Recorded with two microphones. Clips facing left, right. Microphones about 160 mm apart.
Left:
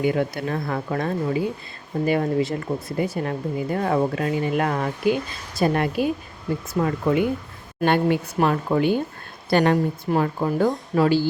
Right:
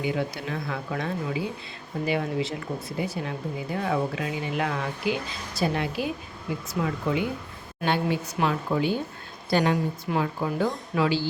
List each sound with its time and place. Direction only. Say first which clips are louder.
0.0 s speech: left 6 dB; 50° left (ahead or behind)